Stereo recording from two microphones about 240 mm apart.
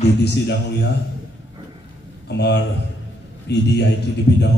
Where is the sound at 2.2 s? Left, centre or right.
Left.